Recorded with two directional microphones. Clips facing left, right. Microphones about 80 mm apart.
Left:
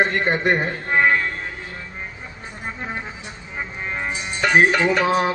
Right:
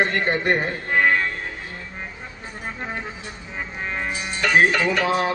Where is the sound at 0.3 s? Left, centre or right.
Left.